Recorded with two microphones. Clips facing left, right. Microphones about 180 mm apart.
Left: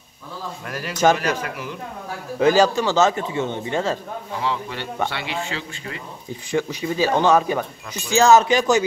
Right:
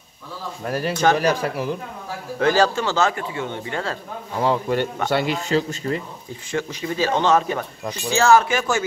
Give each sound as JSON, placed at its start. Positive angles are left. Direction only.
{"t": 0.7, "sound": "a man's voice", "side_deg": -35}
{"t": 2.3, "sound": "speech", "side_deg": 15}
{"t": 4.4, "sound": "speech", "side_deg": -45}
{"t": 6.5, "sound": "speech", "side_deg": 15}